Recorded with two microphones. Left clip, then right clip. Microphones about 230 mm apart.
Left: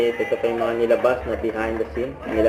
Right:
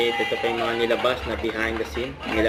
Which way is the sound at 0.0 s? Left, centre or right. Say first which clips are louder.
Left 2 dB; right.